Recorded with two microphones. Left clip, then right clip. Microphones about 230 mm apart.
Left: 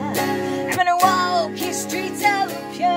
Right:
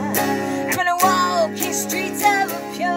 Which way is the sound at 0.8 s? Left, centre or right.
Centre.